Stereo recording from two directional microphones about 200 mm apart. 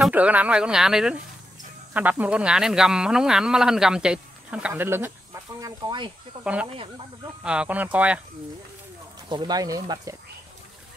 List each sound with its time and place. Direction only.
0.0 s speech: 5° right (ahead or behind); by 6.1 s 25° right (ahead or behind)
6.4 s speech: 5° right (ahead or behind)
9.3 s speech: 20° right (ahead or behind)